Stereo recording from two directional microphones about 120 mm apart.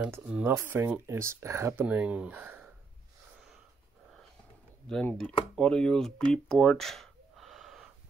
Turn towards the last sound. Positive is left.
turn(degrees=0)  # may be behind; listen again after turning